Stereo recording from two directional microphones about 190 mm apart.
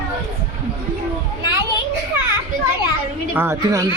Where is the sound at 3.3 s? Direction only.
15° right (ahead or behind).